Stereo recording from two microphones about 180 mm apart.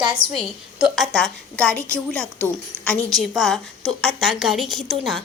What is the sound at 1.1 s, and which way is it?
Speech, 5° left (ahead or behind).